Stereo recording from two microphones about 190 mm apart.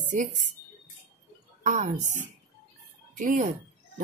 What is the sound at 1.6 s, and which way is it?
Speech, 40° right (ahead or behind).